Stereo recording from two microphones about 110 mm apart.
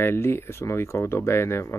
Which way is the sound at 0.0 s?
20° left (ahead or behind).